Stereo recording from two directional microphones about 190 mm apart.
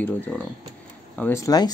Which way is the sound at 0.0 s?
10° left (ahead or behind).